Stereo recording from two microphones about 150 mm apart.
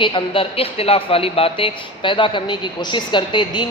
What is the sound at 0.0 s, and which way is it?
Speech, 35° left (ahead or behind).